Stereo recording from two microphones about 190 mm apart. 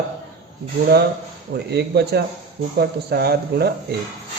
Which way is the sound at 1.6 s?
60° right (ahead or behind).